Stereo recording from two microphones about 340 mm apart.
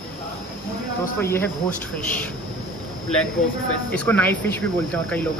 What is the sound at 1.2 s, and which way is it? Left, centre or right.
Speech, centre.